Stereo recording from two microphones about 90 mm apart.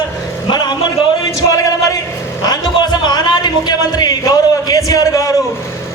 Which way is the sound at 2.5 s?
50° left (ahead or behind).